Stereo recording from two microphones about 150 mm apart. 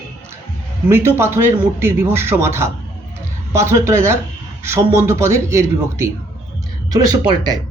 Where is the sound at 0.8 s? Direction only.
15° right (ahead or behind).